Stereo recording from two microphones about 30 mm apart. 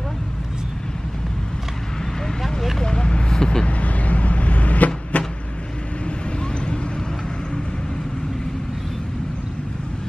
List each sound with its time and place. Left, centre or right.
2.8 s vehicle: left
3.6 s vehicle: left